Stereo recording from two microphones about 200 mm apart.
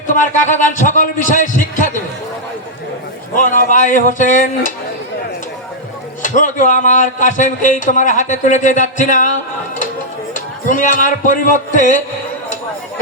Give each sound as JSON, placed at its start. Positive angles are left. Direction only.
{"t": 0.1, "sound": "a man's voice", "side_deg": 40}
{"t": 3.3, "sound": "a man's voice", "side_deg": 40}
{"t": 6.2, "sound": "a man's voice", "side_deg": 40}
{"t": 10.3, "sound": "a man's voice", "side_deg": 40}